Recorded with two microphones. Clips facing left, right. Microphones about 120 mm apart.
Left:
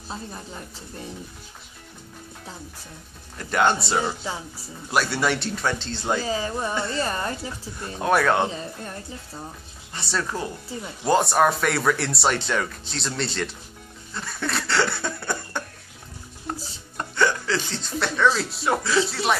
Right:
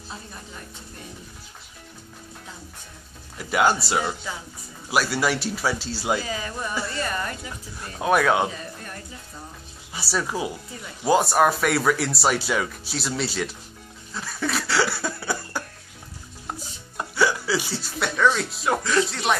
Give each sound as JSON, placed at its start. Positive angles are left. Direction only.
{"t": 3.3, "sound": "speech", "side_deg": -5}
{"t": 4.0, "sound": "speech", "side_deg": 25}
{"t": 4.8, "sound": "speech", "side_deg": -5}
{"t": 6.2, "sound": "speech", "side_deg": 30}
{"t": 8.0, "sound": "speech", "side_deg": 0}
{"t": 9.9, "sound": "speech", "side_deg": -5}
{"t": 16.5, "sound": "chopping", "side_deg": -5}
{"t": 16.9, "sound": "speech", "side_deg": -5}